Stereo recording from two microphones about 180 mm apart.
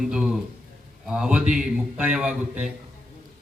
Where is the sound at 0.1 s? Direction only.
5° right (ahead or behind).